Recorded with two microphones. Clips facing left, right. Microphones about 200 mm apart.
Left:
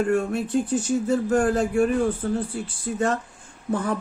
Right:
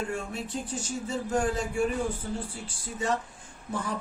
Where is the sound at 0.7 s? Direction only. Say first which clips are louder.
Left 10 dB; 55° left (ahead or behind).